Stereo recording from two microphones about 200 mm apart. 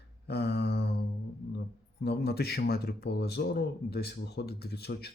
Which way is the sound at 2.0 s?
55° left (ahead or behind).